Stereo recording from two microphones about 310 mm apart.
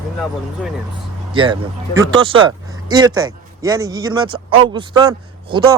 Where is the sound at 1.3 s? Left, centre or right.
Centre.